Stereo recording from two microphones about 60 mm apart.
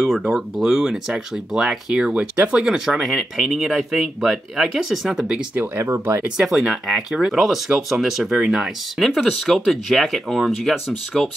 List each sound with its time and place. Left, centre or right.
0.3 s speech: centre
2.1 s speech: right; by 5.4 s centre
5.9 s speech: right
6.2 s speech: centre